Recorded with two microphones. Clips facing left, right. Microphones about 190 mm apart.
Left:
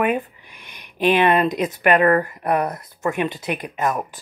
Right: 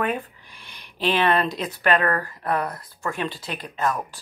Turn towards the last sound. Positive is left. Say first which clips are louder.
# left 3 dB
turn(degrees=15)  # may be behind; listen again after turning